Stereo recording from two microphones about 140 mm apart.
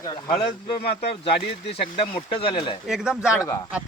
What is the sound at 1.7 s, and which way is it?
Speech, 45° left (ahead or behind).